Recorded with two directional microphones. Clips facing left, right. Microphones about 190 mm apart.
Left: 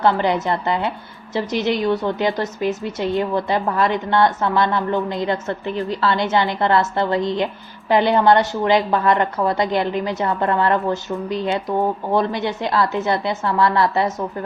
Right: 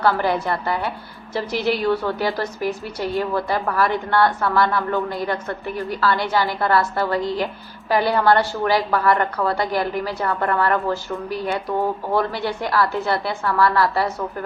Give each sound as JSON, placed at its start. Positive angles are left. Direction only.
{"t": 0.0, "sound": "a woman's voice", "side_deg": 20}